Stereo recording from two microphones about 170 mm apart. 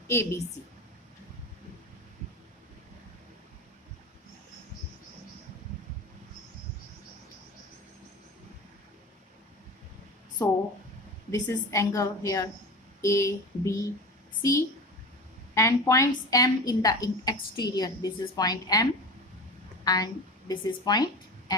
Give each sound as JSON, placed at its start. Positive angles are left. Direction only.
{"t": 0.1, "sound": "a woman's voice", "side_deg": 15}
{"t": 10.4, "sound": "a sound", "side_deg": 15}
{"t": 11.3, "sound": "a woman's voice", "side_deg": 15}
{"t": 15.5, "sound": "a woman's voice", "side_deg": 15}